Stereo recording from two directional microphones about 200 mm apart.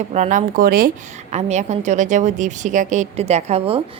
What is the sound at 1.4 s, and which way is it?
A woman's voice, 35° right (ahead or behind).